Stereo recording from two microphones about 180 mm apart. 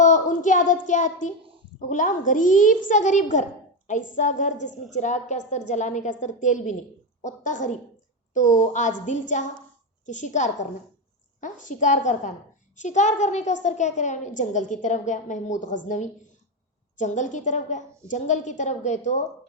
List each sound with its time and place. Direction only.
0.0 s a child's voice: 45° left (ahead or behind)
17.0 s a woman's voice: 45° left (ahead or behind)